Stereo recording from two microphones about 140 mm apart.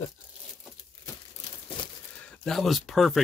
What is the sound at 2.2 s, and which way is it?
Speech, 5° left (ahead or behind).